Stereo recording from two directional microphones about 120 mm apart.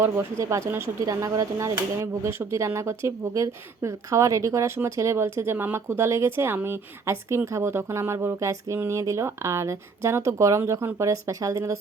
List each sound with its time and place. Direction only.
0.0 s speech: 25° right (ahead or behind)